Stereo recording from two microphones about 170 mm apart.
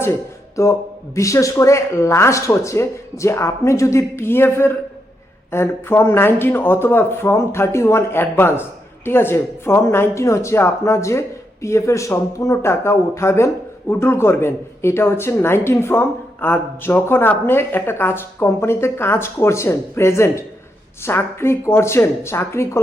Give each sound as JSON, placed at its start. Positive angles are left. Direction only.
{"t": 0.0, "sound": "speech", "side_deg": 15}